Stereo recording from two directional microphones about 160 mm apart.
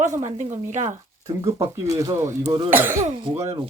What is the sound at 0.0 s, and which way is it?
Speech, 50° right (ahead or behind).